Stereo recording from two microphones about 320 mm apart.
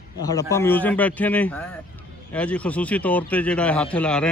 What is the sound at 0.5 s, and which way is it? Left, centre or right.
Speech, centre.